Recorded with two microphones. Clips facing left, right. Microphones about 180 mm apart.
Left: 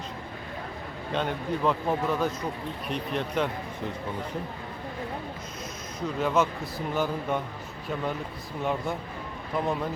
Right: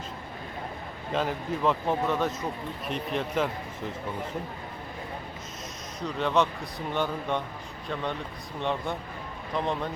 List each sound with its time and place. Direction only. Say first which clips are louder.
1.1 s a man's voice: even; centre (ahead or behind)
6.0 s a man's voice: even; centre (ahead or behind)
8.6 s a man's voice: left 1 dB; 5° left (ahead or behind)